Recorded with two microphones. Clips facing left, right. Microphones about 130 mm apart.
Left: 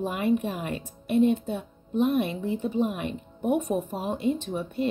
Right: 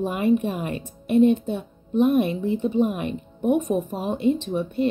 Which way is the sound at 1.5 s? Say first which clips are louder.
Right 4 dB; 60° right (ahead or behind).